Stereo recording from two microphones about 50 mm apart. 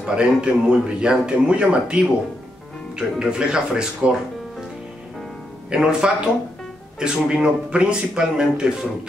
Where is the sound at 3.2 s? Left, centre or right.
Centre.